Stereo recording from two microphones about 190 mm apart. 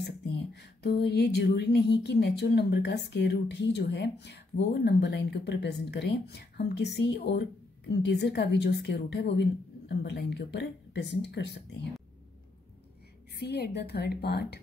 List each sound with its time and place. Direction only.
0.0 s music: 60° left (ahead or behind)
1.0 s speech: 60° left (ahead or behind)
13.4 s speech: 60° left (ahead or behind)